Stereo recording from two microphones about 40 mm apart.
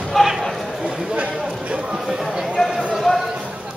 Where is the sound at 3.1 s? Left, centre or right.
Centre.